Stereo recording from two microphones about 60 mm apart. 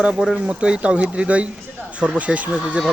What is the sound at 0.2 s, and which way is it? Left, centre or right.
Speech, centre.